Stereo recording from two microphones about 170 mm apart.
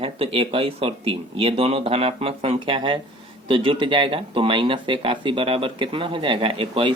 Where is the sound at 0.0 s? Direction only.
35° right (ahead or behind).